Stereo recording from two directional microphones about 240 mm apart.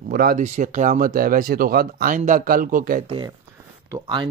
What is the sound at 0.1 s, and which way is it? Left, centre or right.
Speech, right.